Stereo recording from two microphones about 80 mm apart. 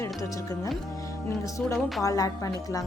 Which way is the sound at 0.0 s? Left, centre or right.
Left.